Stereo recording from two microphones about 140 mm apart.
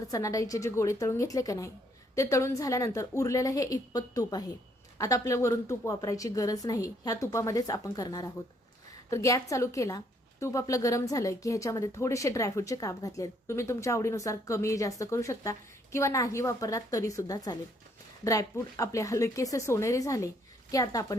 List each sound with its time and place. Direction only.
0.1 s speech: 25° left (ahead or behind)